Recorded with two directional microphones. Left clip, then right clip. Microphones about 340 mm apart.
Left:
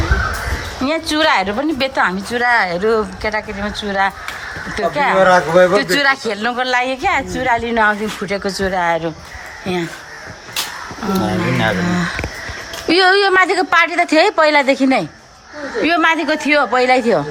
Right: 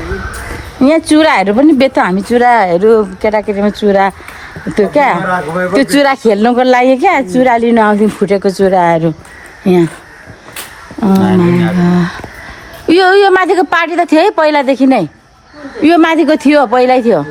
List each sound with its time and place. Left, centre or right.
0.8 s a woman's voice: centre
5.2 s speech: centre
5.7 s a woman's voice: centre
11.8 s a woman's voice: centre